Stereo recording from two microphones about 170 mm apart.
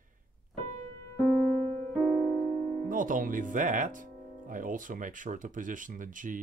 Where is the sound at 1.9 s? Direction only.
10° left (ahead or behind).